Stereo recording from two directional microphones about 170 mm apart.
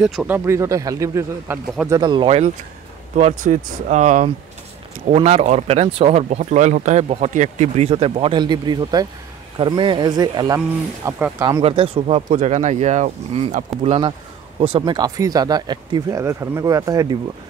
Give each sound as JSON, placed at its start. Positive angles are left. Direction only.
{"t": 0.0, "sound": "speech", "side_deg": 0}
{"t": 0.3, "sound": "speech", "side_deg": -15}
{"t": 11.6, "sound": "speech", "side_deg": -35}
{"t": 14.6, "sound": "speech", "side_deg": -30}